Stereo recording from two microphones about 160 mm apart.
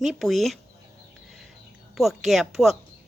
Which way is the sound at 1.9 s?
Centre (ahead or behind).